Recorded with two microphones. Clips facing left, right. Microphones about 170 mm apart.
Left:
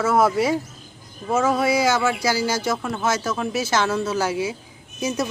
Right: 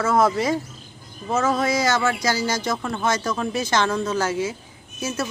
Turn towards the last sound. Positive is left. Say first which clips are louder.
# left 3 dB
turn(degrees=15)  # may be behind; listen again after turning